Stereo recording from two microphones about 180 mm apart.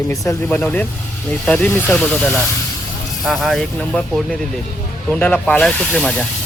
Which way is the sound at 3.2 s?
Centre (ahead or behind).